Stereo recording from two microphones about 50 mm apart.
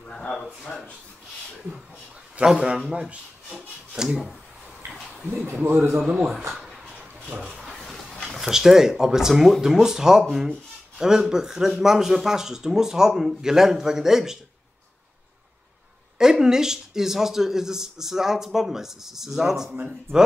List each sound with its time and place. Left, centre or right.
2.6 s a man's voice: centre
5.6 s speech: right
6.0 s a man's voice: right
7.4 s a sound: centre
8.4 s speech: centre
16.2 s speech: centre
20.1 s speech: right